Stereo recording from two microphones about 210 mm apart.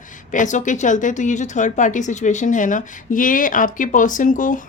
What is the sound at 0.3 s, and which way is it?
A woman's voice, 35° left (ahead or behind).